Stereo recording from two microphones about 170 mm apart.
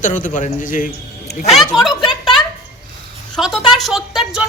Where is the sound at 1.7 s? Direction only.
Centre (ahead or behind).